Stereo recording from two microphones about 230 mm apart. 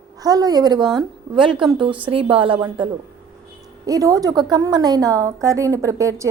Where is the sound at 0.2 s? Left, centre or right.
Centre.